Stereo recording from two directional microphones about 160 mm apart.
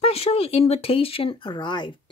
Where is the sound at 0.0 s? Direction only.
40° left (ahead or behind).